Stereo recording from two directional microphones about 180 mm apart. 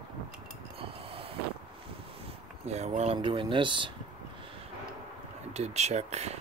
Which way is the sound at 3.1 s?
25° right (ahead or behind).